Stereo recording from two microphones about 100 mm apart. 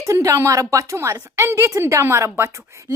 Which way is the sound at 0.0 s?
30° right (ahead or behind).